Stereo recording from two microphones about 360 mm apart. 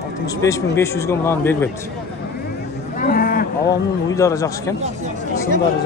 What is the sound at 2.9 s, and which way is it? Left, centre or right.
Cattle, left.